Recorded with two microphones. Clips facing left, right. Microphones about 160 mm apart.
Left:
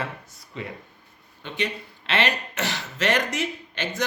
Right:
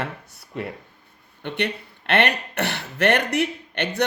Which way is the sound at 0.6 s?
60° right (ahead or behind).